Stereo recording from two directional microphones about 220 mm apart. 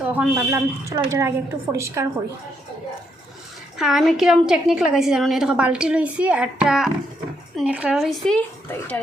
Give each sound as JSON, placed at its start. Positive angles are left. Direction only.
{"t": 0.0, "sound": "a woman's voice", "side_deg": -5}
{"t": 3.8, "sound": "a woman's voice", "side_deg": 0}